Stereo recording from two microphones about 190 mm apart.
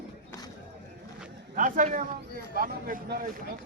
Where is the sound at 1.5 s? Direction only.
45° right (ahead or behind).